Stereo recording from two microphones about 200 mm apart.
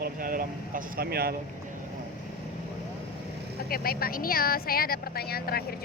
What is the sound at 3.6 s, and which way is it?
Speech, 50° left (ahead or behind).